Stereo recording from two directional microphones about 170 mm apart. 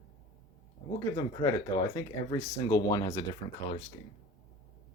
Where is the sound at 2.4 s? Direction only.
20° left (ahead or behind).